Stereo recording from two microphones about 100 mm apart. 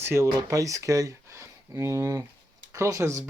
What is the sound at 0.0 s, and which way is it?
Speech, 25° right (ahead or behind).